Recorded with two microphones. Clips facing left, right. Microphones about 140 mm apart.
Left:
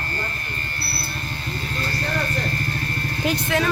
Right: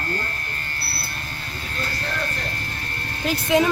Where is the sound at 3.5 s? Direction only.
20° right (ahead or behind).